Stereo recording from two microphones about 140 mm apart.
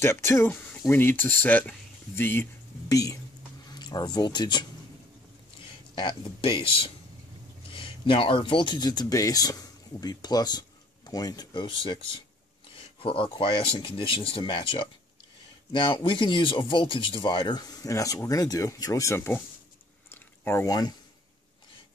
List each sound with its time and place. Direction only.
0.0 s speech: 20° left (ahead or behind)
5.9 s speech: 35° left (ahead or behind); by 19.4 s 15° left (ahead or behind)
20.1 s a sound: 15° left (ahead or behind)